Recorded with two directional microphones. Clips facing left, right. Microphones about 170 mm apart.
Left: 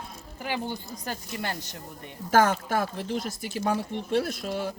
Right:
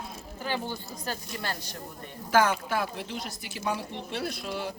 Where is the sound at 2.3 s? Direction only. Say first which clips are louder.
Left 2 dB; 45° left (ahead or behind).